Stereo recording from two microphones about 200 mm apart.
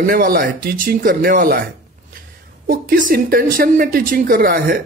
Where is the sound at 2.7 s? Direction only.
45° right (ahead or behind).